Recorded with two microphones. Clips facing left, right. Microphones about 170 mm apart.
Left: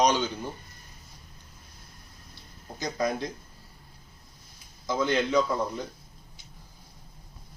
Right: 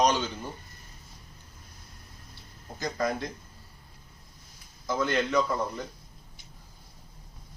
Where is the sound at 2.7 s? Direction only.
20° left (ahead or behind).